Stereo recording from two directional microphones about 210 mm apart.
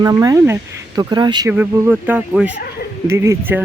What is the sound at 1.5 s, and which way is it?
Speech, 10° right (ahead or behind).